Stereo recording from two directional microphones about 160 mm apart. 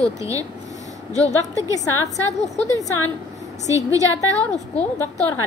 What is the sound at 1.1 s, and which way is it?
Speech, 45° left (ahead or behind).